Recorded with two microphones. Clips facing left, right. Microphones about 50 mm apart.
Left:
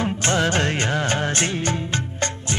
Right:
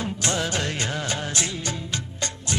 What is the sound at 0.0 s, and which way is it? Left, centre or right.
Music of bollywood, left.